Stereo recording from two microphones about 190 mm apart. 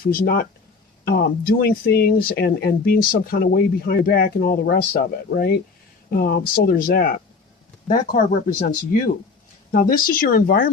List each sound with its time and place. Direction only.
0.0 s speech: 55° left (ahead or behind)
9.7 s speech: 50° left (ahead or behind)